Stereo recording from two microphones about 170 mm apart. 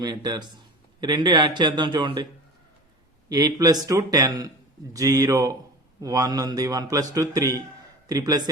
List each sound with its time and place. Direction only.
0.0 s a man's voice: 25° right (ahead or behind)
3.2 s a man's voice: 20° right (ahead or behind)